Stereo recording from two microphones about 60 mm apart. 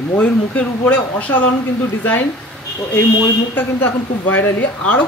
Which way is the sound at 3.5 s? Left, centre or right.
Left.